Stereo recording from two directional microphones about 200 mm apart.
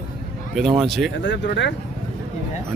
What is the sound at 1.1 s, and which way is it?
Speech, 65° left (ahead or behind).